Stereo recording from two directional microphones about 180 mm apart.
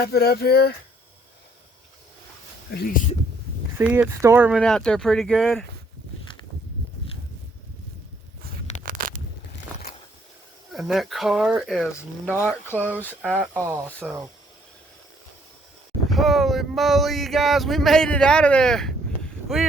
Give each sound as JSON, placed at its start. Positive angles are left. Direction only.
{"t": 0.0, "sound": "speech", "side_deg": 60}
{"t": 2.7, "sound": "speech", "side_deg": 55}
{"t": 3.8, "sound": "speech", "side_deg": -10}
{"t": 4.6, "sound": "speech", "side_deg": 5}
{"t": 8.8, "sound": "a sound", "side_deg": -50}
{"t": 10.7, "sound": "speech", "side_deg": 0}
{"t": 11.9, "sound": "speech", "side_deg": 15}
{"t": 13.7, "sound": "speech", "side_deg": -10}
{"t": 16.0, "sound": "speech", "side_deg": 0}